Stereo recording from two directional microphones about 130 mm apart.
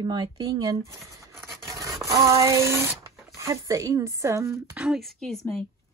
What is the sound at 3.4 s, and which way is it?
Speech, 25° right (ahead or behind).